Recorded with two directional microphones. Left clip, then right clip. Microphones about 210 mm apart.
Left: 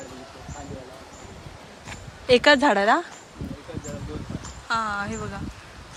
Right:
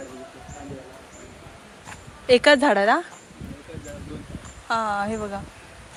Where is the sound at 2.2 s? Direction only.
15° left (ahead or behind).